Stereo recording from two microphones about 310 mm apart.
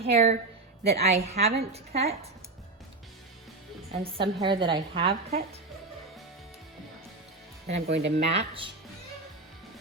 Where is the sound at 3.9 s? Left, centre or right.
Centre.